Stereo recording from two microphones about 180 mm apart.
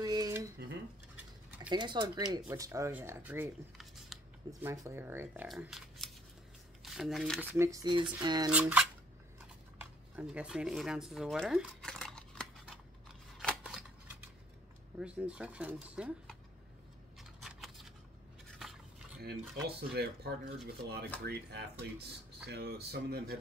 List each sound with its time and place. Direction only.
0.0 s dishes: 20° right (ahead or behind)
1.7 s speech: 25° right (ahead or behind)
3.7 s a sound: centre (ahead or behind)
4.6 s speech: 15° right (ahead or behind)
7.5 s speech: 15° right (ahead or behind)
8.5 s speech: 5° right (ahead or behind)
9.8 s a sound: 10° right (ahead or behind)
13.4 s scissors: centre (ahead or behind)
15.0 s speech: 5° right (ahead or behind)
17.2 s a sound: centre (ahead or behind)
19.2 s speech: 60° right (ahead or behind)